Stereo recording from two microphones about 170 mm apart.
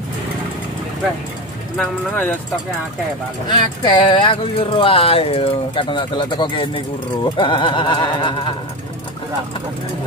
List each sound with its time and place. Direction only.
1.8 s speech: 10° left (ahead or behind)
3.4 s speech: 30° left (ahead or behind)
7.3 s a sound: 30° left (ahead or behind)